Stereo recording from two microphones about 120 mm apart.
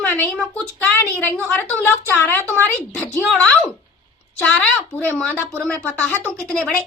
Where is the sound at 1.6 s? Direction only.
15° left (ahead or behind).